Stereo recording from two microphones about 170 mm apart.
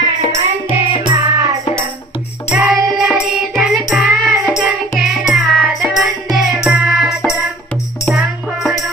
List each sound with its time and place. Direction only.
0.0 s music: 35° left (ahead or behind)
1.0 s music: 20° right (ahead or behind)
2.5 s music: 5° right (ahead or behind)